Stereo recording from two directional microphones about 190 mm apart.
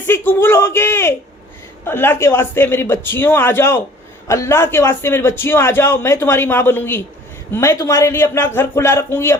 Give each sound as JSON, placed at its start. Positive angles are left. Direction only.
{"t": 0.1, "sound": "a man's voice", "side_deg": 10}